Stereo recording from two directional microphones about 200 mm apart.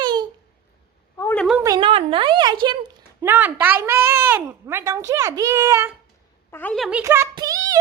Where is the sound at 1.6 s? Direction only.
20° right (ahead or behind).